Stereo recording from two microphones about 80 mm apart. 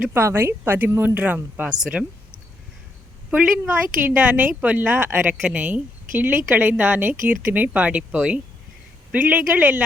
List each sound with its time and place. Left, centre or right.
0.1 s a woman's voice: right; by 2.0 s centre
3.2 s a woman's voice: centre
5.3 s a woman's voice: centre